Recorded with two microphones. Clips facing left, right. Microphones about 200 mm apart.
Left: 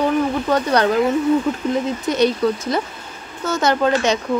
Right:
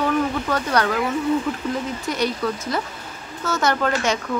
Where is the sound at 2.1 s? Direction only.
20° left (ahead or behind).